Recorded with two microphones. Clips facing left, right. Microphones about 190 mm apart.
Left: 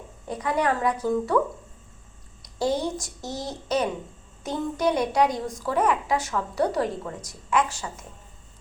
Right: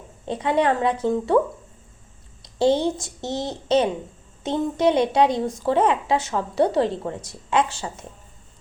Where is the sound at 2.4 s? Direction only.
25° right (ahead or behind).